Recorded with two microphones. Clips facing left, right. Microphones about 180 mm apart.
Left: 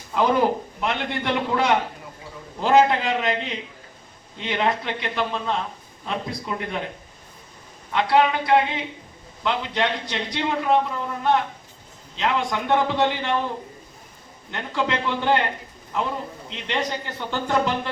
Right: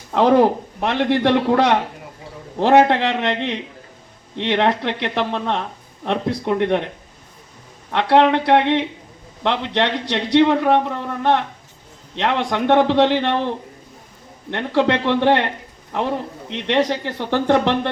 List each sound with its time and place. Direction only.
0.1 s a man's voice: 70° right (ahead or behind)
7.9 s a man's voice: 70° right (ahead or behind)
14.5 s a man's voice: 70° right (ahead or behind)
16.5 s a man's voice: 75° right (ahead or behind)